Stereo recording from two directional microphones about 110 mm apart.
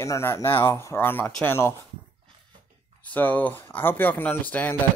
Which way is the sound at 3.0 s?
15° left (ahead or behind).